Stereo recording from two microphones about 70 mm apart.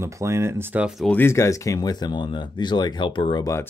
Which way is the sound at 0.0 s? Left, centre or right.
Right.